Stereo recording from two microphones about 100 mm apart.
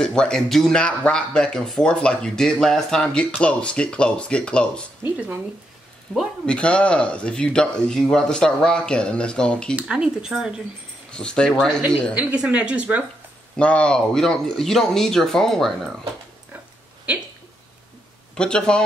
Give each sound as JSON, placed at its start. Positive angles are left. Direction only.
{"t": 0.0, "sound": "speech", "side_deg": 5}
{"t": 5.0, "sound": "speech", "side_deg": -20}
{"t": 6.4, "sound": "speech", "side_deg": 10}
{"t": 9.8, "sound": "speech", "side_deg": -10}
{"t": 11.1, "sound": "speech", "side_deg": 10}
{"t": 12.2, "sound": "speech", "side_deg": -15}
{"t": 13.6, "sound": "speech", "side_deg": 10}
{"t": 18.3, "sound": "speech", "side_deg": 5}